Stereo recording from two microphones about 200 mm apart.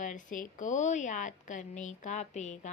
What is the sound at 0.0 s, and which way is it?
A woman's voice, 40° left (ahead or behind).